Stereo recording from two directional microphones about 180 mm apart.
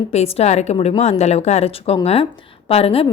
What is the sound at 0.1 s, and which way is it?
A woman's voice, 35° left (ahead or behind).